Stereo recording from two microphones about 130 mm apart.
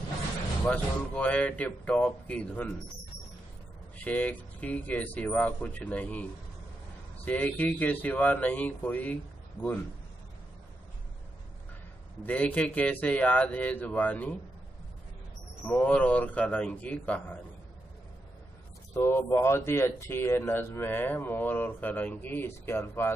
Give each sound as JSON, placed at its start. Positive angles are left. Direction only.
{"t": 0.7, "sound": "speech", "side_deg": 10}
{"t": 4.0, "sound": "speech", "side_deg": 10}
{"t": 7.2, "sound": "speech", "side_deg": 10}
{"t": 12.2, "sound": "speech", "side_deg": 10}
{"t": 15.6, "sound": "speech", "side_deg": 10}
{"t": 18.9, "sound": "speech", "side_deg": 20}